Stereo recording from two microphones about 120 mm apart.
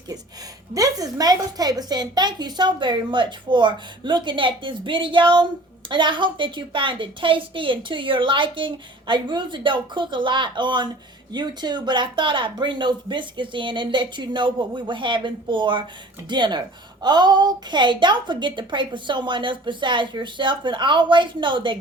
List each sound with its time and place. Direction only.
0.7 s a woman's voice: 30° right (ahead or behind)